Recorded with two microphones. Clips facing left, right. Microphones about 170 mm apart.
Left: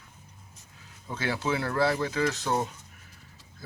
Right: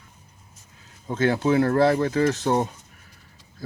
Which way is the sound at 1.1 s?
50° right (ahead or behind).